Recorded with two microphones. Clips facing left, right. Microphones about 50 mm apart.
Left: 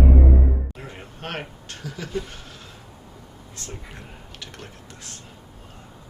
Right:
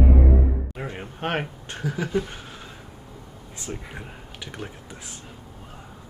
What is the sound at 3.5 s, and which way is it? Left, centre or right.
Speech, centre.